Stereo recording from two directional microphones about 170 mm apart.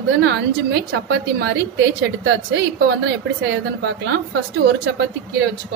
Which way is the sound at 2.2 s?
90° right.